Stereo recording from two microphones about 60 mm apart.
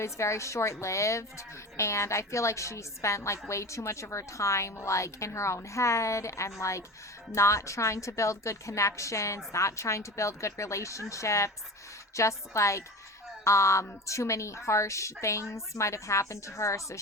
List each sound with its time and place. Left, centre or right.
0.0 s a woman's voice: left